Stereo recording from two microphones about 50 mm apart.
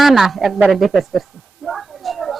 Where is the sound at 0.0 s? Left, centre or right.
Centre.